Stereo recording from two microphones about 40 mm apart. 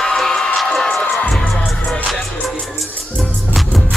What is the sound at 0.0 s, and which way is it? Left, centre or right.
Music, centre.